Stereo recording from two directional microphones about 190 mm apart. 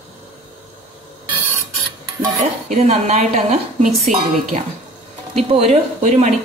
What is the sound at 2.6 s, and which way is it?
Speech, 35° right (ahead or behind).